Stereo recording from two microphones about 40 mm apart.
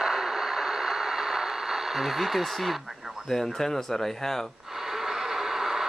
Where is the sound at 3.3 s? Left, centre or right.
Centre.